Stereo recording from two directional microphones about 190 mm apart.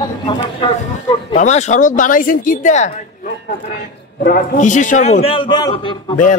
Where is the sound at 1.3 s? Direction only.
40° left (ahead or behind).